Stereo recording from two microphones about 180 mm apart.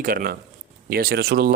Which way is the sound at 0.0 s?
50° right (ahead or behind).